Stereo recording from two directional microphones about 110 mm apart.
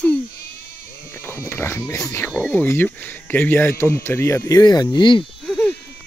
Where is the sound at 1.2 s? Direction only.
20° left (ahead or behind).